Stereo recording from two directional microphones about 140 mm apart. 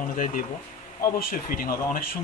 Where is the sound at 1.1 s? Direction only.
90° left.